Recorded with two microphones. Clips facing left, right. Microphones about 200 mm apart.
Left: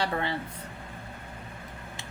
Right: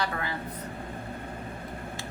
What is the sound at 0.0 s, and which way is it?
Speech, 25° left (ahead or behind).